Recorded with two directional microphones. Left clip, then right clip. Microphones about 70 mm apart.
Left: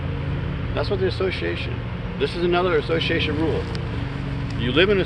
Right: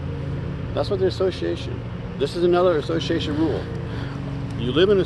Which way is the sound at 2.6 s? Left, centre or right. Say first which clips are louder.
Right 1 dB; right.